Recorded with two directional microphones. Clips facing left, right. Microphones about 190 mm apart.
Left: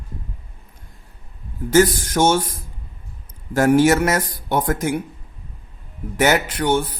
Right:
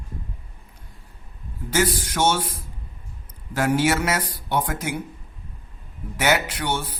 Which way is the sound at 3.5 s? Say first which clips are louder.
Left 7 dB; 45° left (ahead or behind).